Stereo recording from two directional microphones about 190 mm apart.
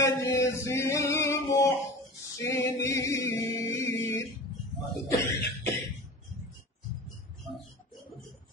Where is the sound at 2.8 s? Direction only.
15° left (ahead or behind).